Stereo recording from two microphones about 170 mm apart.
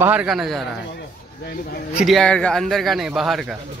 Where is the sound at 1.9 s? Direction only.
Centre (ahead or behind).